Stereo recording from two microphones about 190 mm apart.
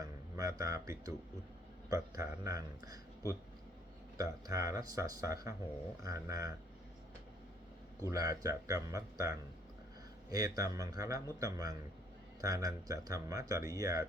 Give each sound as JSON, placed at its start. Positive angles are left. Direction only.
{"t": 0.0, "sound": "speech", "side_deg": -20}
{"t": 8.1, "sound": "a man's voice", "side_deg": -20}